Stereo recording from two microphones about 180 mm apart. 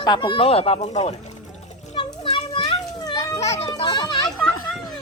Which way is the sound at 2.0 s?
25° left (ahead or behind).